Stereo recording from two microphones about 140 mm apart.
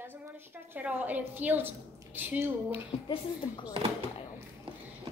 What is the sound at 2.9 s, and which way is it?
Speech, 45° left (ahead or behind).